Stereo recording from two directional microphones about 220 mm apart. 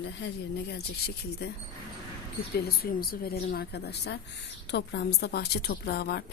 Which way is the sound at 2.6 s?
45° left (ahead or behind).